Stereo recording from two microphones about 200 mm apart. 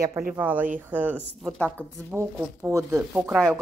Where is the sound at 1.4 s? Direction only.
5° left (ahead or behind).